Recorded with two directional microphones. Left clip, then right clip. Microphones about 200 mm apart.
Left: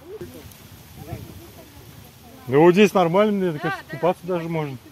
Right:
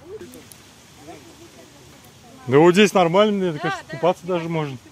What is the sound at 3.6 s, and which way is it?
Speech, 25° right (ahead or behind).